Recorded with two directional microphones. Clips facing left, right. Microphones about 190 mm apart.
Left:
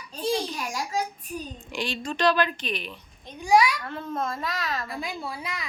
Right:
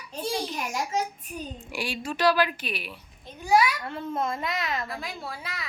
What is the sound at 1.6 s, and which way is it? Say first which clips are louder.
A child's voice: left 1 dB; 10° right (ahead or behind).